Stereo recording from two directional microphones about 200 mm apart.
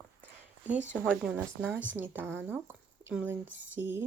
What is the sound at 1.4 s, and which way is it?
Speech, 10° right (ahead or behind).